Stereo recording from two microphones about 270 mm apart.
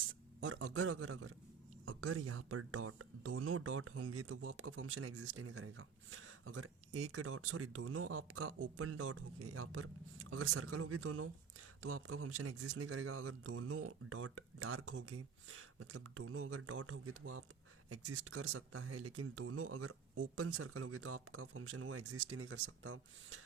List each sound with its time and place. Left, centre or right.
0.3 s speech: right